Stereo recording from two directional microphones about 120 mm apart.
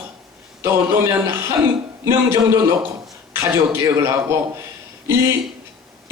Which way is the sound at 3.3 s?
20° right (ahead or behind).